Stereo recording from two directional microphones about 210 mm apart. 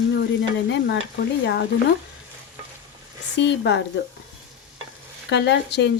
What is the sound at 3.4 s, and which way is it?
Speech, 55° left (ahead or behind).